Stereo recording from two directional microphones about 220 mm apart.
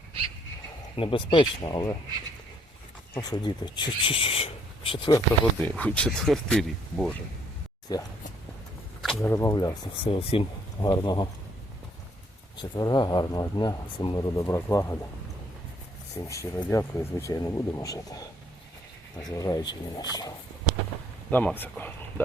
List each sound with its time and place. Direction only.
0.9 s speech: 20° left (ahead or behind)
3.2 s speech: 20° left (ahead or behind)
5.5 s speech: 5° left (ahead or behind)
7.9 s speech: 15° left (ahead or behind)
9.0 s a sound: centre (ahead or behind)
9.3 s speech: 15° left (ahead or behind)
12.7 s speech: 20° left (ahead or behind)
16.3 s speech: 15° left (ahead or behind)